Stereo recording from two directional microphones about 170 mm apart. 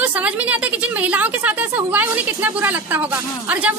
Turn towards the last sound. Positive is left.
turn(degrees=-10)  # may be behind; listen again after turning